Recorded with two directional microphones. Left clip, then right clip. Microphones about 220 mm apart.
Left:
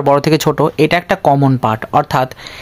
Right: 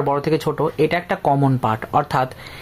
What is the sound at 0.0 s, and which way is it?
Speech, 45° left (ahead or behind).